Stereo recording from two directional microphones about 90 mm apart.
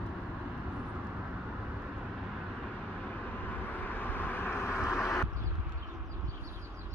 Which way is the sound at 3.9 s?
20° left (ahead or behind).